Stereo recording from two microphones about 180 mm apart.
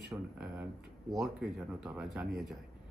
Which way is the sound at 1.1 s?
Centre (ahead or behind).